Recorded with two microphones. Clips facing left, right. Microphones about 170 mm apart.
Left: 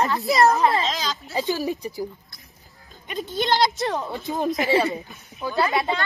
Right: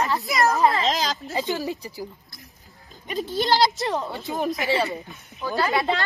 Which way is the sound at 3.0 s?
Centre (ahead or behind).